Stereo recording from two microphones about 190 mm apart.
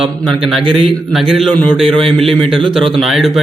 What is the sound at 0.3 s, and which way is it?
A man's voice, centre (ahead or behind).